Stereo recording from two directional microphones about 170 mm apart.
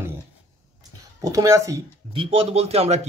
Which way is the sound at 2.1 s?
30° right (ahead or behind).